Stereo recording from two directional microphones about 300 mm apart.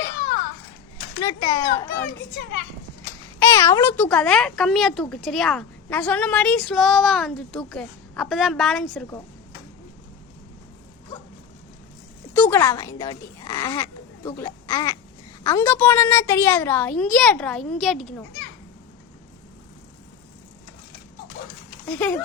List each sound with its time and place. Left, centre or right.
1.2 s a child's voice: centre
3.5 s speech: centre
12.3 s speech: centre
21.8 s speech: centre